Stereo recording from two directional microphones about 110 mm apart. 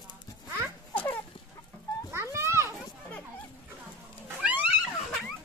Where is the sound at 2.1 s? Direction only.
25° right (ahead or behind).